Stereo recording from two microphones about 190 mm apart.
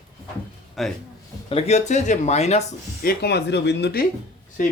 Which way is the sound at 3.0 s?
55° left (ahead or behind).